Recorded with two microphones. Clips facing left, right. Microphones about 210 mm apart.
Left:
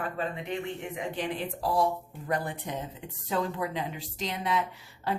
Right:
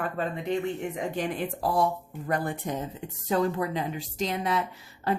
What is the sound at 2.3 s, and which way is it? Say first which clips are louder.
Speech: right 3 dB; 50° right (ahead or behind).